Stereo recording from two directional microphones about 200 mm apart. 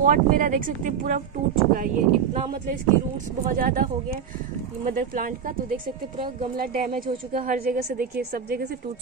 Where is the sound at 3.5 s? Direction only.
45° right (ahead or behind).